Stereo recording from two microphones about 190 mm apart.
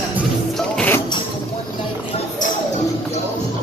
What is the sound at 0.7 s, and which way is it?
Music, 10° left (ahead or behind).